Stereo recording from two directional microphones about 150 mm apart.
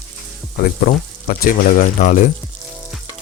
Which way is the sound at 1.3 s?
65° left (ahead or behind).